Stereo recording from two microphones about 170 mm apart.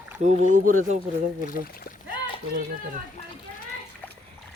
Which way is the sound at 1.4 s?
55° left (ahead or behind).